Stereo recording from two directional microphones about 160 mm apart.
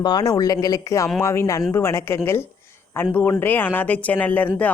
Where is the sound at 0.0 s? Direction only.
25° left (ahead or behind).